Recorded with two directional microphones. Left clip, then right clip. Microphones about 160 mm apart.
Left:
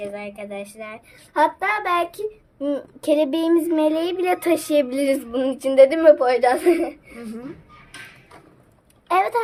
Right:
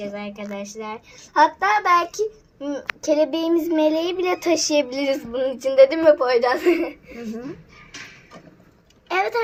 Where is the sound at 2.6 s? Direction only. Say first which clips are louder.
Left 1 dB; 45° left (ahead or behind); by 6.2 s 30° left (ahead or behind).